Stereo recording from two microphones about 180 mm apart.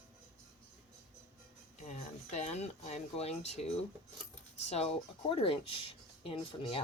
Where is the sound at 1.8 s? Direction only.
40° left (ahead or behind).